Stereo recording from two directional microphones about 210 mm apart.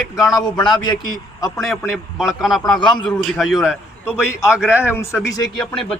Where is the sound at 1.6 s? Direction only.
Centre (ahead or behind).